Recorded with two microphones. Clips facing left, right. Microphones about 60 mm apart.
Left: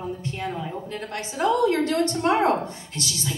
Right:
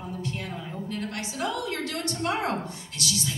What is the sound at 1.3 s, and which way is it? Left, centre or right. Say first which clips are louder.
A woman's voice: left 11 dB; left.